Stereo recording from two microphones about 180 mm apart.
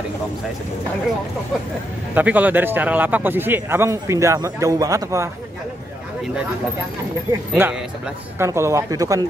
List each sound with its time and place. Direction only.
2.1 s speech: 10° right (ahead or behind)
7.6 s speech: 15° right (ahead or behind)